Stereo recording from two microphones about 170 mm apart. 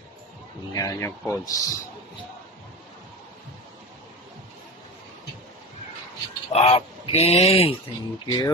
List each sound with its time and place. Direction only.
0.7 s speech: 15° left (ahead or behind)
6.5 s speech: 35° left (ahead or behind)